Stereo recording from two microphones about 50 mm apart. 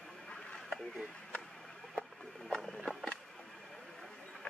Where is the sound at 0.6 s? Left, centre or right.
Centre.